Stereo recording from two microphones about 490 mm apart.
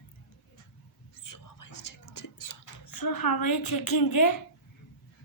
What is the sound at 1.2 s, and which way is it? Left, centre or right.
Whispering, left.